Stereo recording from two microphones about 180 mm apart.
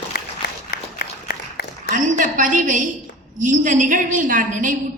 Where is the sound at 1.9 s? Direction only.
45° right (ahead or behind).